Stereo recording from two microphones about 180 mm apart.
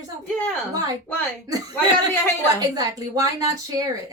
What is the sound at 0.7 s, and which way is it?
A woman's voice, 20° right (ahead or behind).